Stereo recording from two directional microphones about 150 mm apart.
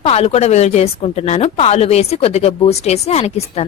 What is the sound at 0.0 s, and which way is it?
A woman's voice, 45° left (ahead or behind).